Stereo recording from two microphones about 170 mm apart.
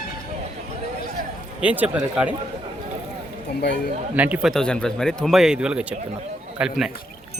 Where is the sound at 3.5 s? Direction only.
75° left (ahead or behind).